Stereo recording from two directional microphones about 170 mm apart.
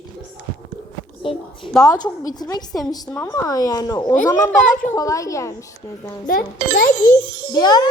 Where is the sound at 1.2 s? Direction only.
30° left (ahead or behind).